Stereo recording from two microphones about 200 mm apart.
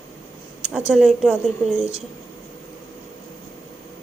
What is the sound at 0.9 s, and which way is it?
Speech, centre (ahead or behind).